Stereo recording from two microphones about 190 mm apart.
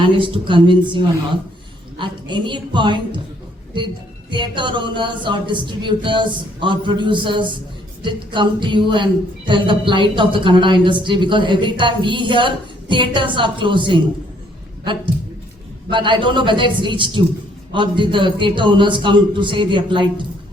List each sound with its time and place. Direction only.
0.0 s a woman's voice: 25° right (ahead or behind)
4.3 s a woman's voice: 25° right (ahead or behind)
15.9 s a woman's voice: 25° right (ahead or behind)